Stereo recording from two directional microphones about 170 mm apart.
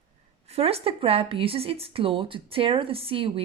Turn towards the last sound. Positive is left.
turn(degrees=-35)  # may be behind; listen again after turning